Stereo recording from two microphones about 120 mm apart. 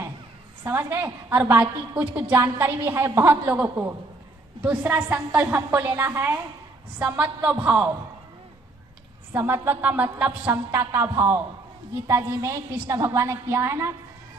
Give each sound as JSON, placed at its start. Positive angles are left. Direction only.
{"t": 0.6, "sound": "a woman's voice", "side_deg": -20}
{"t": 9.3, "sound": "a woman's voice", "side_deg": -15}